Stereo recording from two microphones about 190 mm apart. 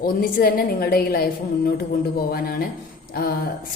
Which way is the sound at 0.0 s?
50° left (ahead or behind).